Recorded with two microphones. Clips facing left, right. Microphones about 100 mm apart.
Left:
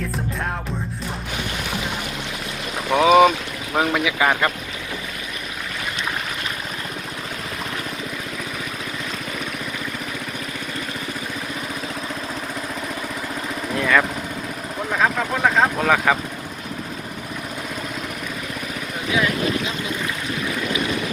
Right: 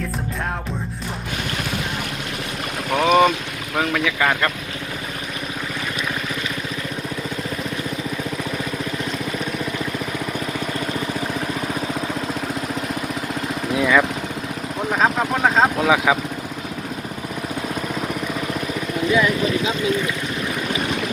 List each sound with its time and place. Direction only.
2.9 s speech: 10° left (ahead or behind)
13.7 s lawn mower: 5° right (ahead or behind)
14.9 s vehicle: 25° right (ahead or behind)
15.8 s speech: 5° right (ahead or behind)